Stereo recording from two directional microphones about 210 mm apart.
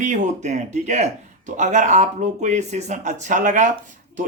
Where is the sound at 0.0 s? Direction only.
35° right (ahead or behind).